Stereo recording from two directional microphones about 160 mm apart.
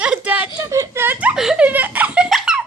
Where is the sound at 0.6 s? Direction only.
20° right (ahead or behind).